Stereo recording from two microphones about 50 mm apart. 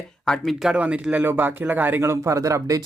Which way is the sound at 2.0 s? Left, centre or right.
Right.